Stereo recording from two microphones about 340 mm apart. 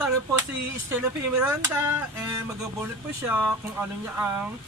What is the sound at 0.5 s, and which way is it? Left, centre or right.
Speech, right.